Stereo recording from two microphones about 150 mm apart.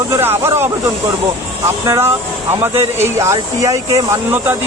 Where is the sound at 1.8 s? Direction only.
20° right (ahead or behind).